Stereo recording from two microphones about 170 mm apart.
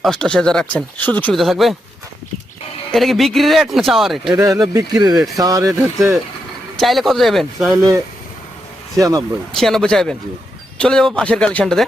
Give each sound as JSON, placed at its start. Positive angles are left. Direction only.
{"t": 0.0, "sound": "speech", "side_deg": 5}
{"t": 2.9, "sound": "speech", "side_deg": 0}
{"t": 4.3, "sound": "speech", "side_deg": -20}
{"t": 6.7, "sound": "speech", "side_deg": 0}
{"t": 7.8, "sound": "speech", "side_deg": -20}
{"t": 9.6, "sound": "speech", "side_deg": 0}